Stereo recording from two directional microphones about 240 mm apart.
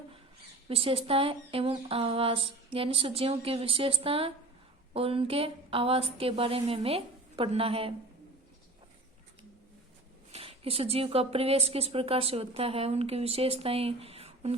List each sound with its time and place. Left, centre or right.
0.7 s a woman's voice: right
10.3 s a woman's voice: right